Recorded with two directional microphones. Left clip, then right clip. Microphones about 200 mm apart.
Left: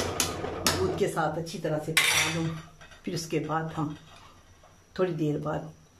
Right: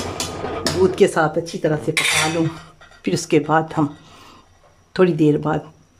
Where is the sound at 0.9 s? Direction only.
55° right (ahead or behind).